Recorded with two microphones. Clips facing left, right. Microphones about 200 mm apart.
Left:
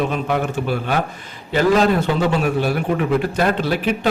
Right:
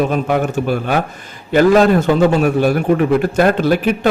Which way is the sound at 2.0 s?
45° right (ahead or behind).